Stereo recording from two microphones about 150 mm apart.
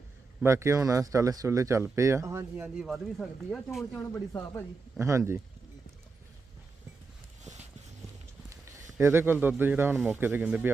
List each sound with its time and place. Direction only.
0.4 s speech: 20° right (ahead or behind)
2.6 s speech: centre (ahead or behind)
4.1 s speech: 20° left (ahead or behind)
4.9 s speech: 20° right (ahead or behind)
8.9 s speech: 15° right (ahead or behind)